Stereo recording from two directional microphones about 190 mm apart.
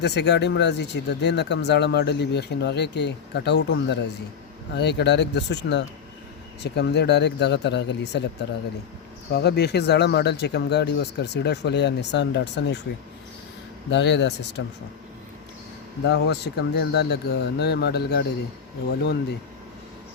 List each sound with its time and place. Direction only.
0.0 s speech: 60° left (ahead or behind)
13.9 s speech: 70° left (ahead or behind)
16.0 s speech: 65° left (ahead or behind)